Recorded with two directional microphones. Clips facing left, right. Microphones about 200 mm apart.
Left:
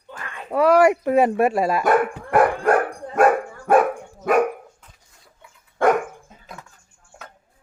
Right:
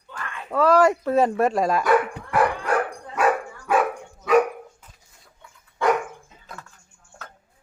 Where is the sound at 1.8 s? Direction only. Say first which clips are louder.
Left 2 dB; 50° left (ahead or behind).